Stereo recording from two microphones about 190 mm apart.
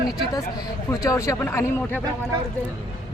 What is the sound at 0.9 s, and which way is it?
Speech, 15° left (ahead or behind).